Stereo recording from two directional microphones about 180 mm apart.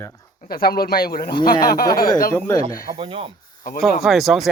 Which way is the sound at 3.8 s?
Centre (ahead or behind).